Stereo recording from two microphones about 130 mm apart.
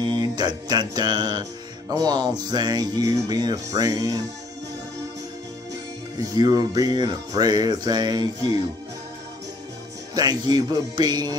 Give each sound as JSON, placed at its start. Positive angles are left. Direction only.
{"t": 0.0, "sound": "mantra", "side_deg": -35}
{"t": 1.9, "sound": "music", "side_deg": -30}
{"t": 6.3, "sound": "music", "side_deg": -30}
{"t": 10.1, "sound": "music", "side_deg": -30}